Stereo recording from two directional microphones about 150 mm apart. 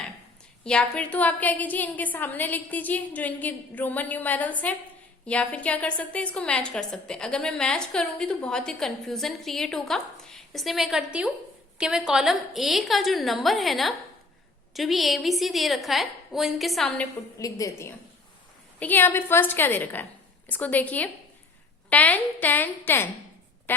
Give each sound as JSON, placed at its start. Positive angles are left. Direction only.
{"t": 0.6, "sound": "a woman's voice", "side_deg": 5}
{"t": 17.3, "sound": "a woman's voice", "side_deg": 20}